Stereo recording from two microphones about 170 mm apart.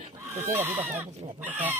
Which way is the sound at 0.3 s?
15° right (ahead or behind).